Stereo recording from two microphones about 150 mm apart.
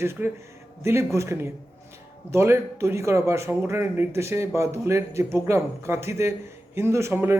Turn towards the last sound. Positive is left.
turn(degrees=-15)  # may be behind; listen again after turning